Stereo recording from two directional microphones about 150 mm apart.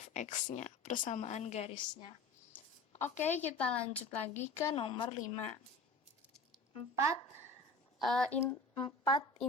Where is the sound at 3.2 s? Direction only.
50° left (ahead or behind).